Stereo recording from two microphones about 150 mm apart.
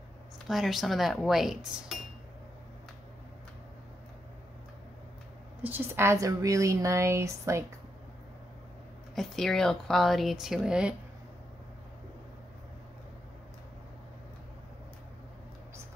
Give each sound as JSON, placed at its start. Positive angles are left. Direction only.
{"t": 0.5, "sound": "speech", "side_deg": 0}
{"t": 5.6, "sound": "speech", "side_deg": -15}
{"t": 9.1, "sound": "speech", "side_deg": 0}